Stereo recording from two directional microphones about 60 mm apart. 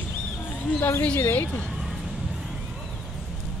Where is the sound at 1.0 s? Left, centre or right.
Left.